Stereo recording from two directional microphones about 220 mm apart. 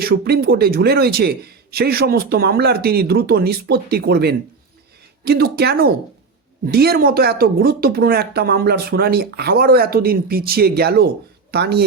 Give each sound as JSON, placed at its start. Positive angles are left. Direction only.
{"t": 0.0, "sound": "speech", "side_deg": -45}